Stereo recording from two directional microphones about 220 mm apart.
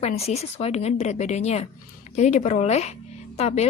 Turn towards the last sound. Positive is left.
turn(degrees=30)  # may be behind; listen again after turning